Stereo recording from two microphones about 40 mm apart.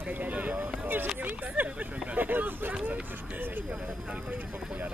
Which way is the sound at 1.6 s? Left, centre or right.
Right.